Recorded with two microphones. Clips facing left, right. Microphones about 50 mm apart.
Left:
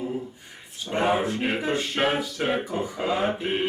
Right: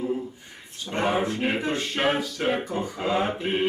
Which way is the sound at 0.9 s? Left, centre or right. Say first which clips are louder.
Left 1 dB; centre.